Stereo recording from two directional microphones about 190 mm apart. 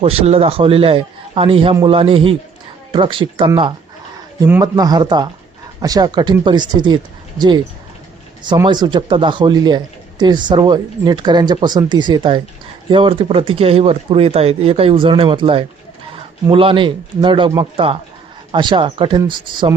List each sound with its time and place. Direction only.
0.0 s a man's voice: 30° right (ahead or behind)
4.4 s a man's voice: 15° right (ahead or behind)
8.4 s a man's voice: 25° right (ahead or behind)